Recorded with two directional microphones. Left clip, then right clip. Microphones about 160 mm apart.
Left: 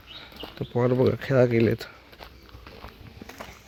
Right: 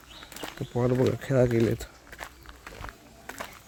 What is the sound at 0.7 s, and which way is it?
Speech, centre (ahead or behind).